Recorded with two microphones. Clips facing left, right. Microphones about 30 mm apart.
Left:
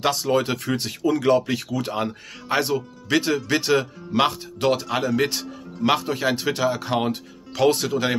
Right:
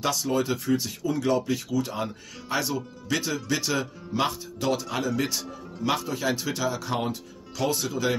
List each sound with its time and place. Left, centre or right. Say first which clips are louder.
0.0 s speech: left 5 dB; left
4.8 s a man's voice: left 5 dB; left
5.1 s speech: left 5 dB; left